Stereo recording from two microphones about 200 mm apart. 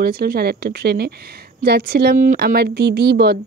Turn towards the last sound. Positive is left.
turn(degrees=-55)  # may be behind; listen again after turning